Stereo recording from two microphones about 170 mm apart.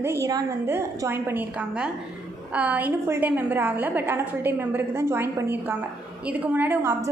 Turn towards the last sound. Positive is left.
turn(degrees=-15)  # may be behind; listen again after turning